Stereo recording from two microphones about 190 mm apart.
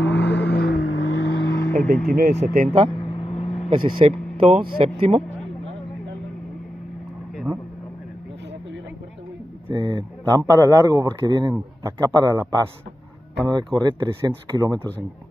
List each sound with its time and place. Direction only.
0.0 s vehicle: 65° left (ahead or behind)
0.8 s vehicle: 80° left
1.9 s speech: 55° right (ahead or behind)
3.1 s vehicle: 30° left (ahead or behind)
3.7 s speech: 30° right (ahead or behind)
9.7 s a man's voice: 25° right (ahead or behind)